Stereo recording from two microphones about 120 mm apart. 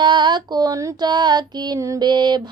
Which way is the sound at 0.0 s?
40° right (ahead or behind).